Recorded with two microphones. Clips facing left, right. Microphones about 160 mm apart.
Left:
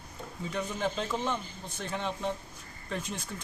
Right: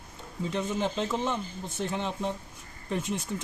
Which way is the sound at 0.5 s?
25° right (ahead or behind).